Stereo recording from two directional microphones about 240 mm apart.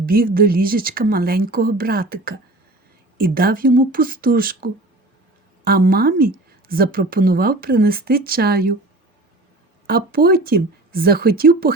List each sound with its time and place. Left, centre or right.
0.0 s speech: right
9.8 s speech: right